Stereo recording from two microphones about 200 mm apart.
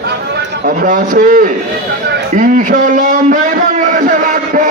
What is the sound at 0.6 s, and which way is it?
A man's voice, 45° right (ahead or behind).